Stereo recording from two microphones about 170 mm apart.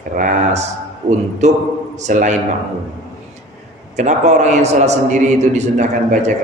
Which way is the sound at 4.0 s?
45° right (ahead or behind).